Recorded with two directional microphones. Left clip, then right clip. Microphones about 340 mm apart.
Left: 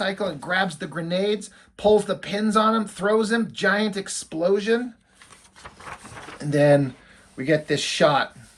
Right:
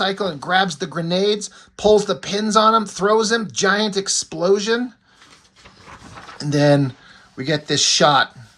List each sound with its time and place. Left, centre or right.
0.0 s speech: centre
6.5 s speech: centre